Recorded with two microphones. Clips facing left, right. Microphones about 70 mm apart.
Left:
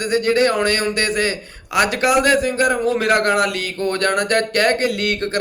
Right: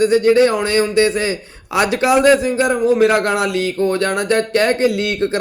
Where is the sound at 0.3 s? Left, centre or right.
Centre.